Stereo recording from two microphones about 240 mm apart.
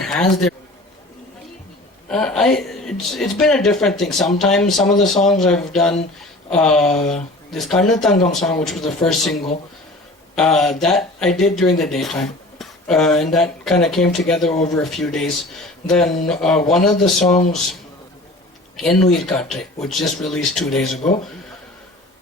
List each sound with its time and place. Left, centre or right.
0.0 s a man's voice: centre
2.0 s speech: centre
17.0 s speech: left
18.8 s speech: centre
21.0 s speech: left